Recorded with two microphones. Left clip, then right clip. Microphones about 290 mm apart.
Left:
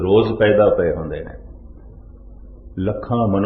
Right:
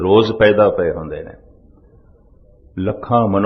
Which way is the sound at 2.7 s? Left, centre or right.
Right.